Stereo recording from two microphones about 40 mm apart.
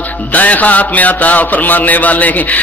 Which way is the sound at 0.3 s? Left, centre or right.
Left.